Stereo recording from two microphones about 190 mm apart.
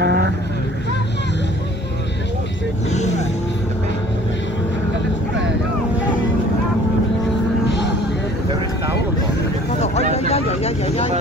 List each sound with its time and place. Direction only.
0.0 s vehicle: 60° right (ahead or behind)
2.9 s vehicle: 35° left (ahead or behind)
10.1 s a sound: 30° left (ahead or behind)